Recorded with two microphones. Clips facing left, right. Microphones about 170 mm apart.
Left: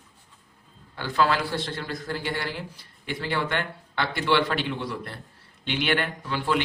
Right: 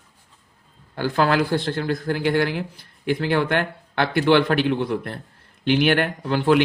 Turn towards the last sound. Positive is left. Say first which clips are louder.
# right 8 dB
turn(degrees=-55)  # may be behind; listen again after turning